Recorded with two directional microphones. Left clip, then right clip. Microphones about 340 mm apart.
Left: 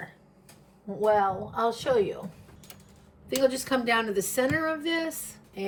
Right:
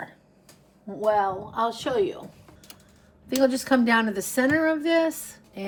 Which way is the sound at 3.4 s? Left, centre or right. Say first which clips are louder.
Right 4 dB; right.